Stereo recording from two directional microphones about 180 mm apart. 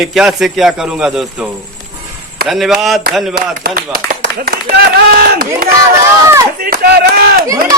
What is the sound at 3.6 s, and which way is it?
A man's voice, 60° right (ahead or behind).